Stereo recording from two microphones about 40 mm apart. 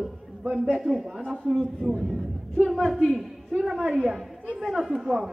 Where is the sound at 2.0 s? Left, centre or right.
Centre.